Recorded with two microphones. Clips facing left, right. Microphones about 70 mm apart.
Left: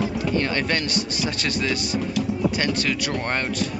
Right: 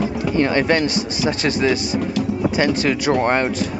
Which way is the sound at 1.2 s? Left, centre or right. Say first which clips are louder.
Right 10 dB; centre.